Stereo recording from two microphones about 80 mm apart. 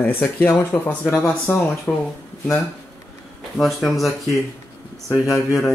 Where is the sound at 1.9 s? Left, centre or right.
Centre.